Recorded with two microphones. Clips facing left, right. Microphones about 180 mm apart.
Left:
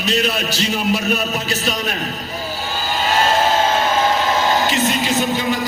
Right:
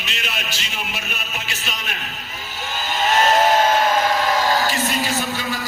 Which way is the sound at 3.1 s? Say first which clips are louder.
Right 1 dB; 30° left (ahead or behind).